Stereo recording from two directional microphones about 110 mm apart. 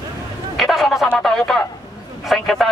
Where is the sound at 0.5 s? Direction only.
Centre (ahead or behind).